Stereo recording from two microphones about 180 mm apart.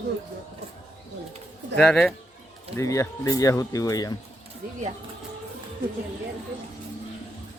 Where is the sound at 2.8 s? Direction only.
15° left (ahead or behind).